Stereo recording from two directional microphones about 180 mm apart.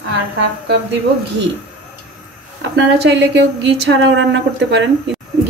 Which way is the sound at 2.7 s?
70° right (ahead or behind).